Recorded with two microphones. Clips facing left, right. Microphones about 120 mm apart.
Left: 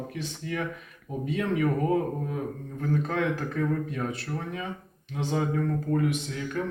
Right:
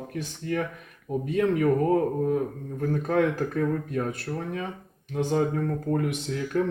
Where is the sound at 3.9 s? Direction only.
50° right (ahead or behind).